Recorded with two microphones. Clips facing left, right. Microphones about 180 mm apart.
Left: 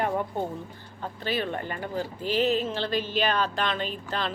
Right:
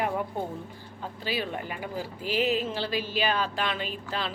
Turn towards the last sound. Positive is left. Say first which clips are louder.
# left 2 dB
turn(degrees=-5)  # may be behind; listen again after turning